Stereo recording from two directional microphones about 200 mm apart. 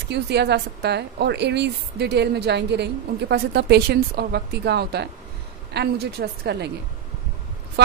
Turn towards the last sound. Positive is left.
turn(degrees=-55)  # may be behind; listen again after turning